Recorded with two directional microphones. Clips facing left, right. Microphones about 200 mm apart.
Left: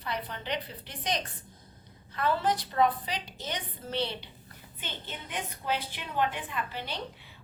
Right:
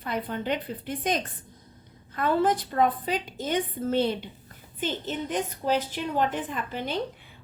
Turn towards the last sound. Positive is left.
turn(degrees=-45)  # may be behind; listen again after turning